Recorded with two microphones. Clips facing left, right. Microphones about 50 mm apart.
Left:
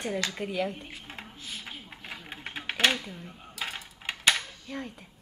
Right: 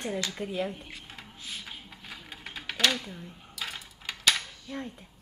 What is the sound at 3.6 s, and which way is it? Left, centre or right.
Coin, left.